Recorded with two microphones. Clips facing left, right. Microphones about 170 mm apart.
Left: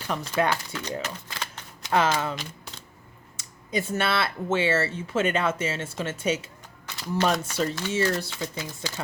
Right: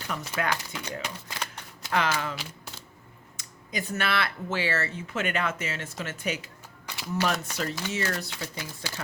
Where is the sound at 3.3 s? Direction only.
25° left (ahead or behind).